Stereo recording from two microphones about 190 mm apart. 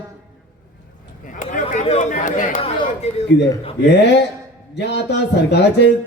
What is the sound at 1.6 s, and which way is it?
Chatter, 30° left (ahead or behind).